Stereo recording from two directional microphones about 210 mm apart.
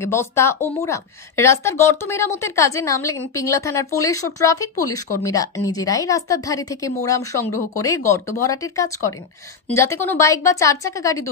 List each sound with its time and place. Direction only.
0.0 s a woman's voice: 10° left (ahead or behind)